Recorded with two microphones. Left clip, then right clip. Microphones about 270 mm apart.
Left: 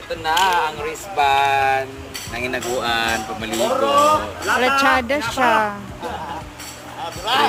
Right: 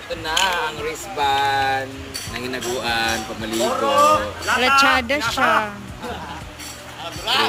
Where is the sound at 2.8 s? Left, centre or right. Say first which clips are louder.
Left 1 dB; centre.